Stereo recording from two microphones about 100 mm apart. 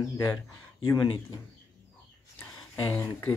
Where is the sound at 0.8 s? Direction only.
50° left (ahead or behind).